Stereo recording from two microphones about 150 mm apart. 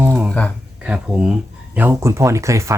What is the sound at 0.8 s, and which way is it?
Speech, 5° right (ahead or behind).